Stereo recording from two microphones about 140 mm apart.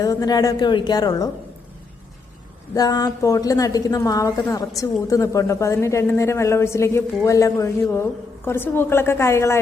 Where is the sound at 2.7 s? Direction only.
25° left (ahead or behind).